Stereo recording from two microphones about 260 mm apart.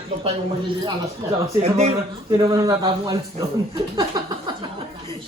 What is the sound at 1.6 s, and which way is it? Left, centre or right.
A man's voice, right.